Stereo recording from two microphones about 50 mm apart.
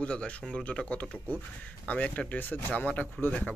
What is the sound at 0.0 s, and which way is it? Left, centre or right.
Speech, left.